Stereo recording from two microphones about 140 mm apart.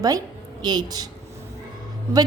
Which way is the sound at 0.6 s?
30° right (ahead or behind).